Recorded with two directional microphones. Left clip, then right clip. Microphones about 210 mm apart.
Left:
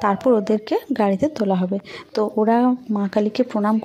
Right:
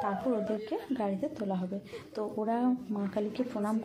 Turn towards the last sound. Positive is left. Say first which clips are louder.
# left 13 dB
turn(degrees=45)  # may be behind; listen again after turning